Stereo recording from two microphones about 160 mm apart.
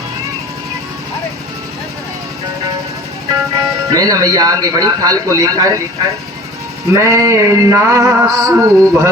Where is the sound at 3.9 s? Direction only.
25° right (ahead or behind).